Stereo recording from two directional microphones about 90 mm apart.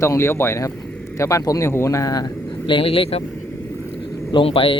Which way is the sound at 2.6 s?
80° left.